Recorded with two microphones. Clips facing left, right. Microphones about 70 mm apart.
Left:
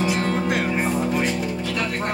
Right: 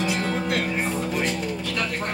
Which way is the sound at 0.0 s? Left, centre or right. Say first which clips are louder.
Left 3 dB; centre.